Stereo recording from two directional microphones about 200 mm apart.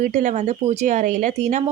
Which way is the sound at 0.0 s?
40° right (ahead or behind).